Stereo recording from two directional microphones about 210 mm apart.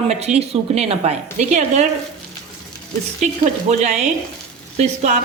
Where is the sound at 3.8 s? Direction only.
30° right (ahead or behind).